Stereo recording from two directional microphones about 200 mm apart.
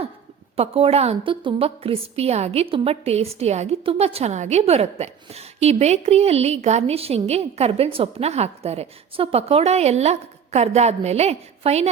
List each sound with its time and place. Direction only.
0.5 s a woman's voice: 30° right (ahead or behind)